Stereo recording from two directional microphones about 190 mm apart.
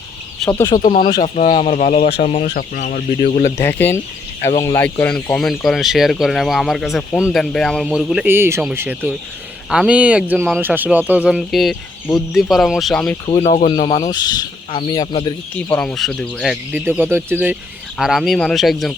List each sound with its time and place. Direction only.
0.5 s speech: 20° left (ahead or behind)
0.8 s speech: 45° left (ahead or behind)
3.8 s speech: 10° left (ahead or behind)
10.6 s speech: 10° right (ahead or behind)
13.2 s speech: 30° left (ahead or behind)
15.5 s speech: 5° left (ahead or behind)
16.7 s speech: 10° right (ahead or behind)